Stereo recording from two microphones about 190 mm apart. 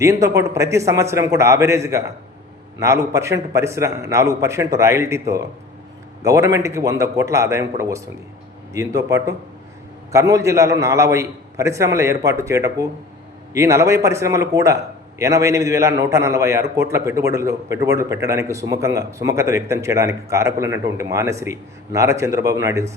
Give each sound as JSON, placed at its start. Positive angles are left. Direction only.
{"t": 0.0, "sound": "a man's voice", "side_deg": -15}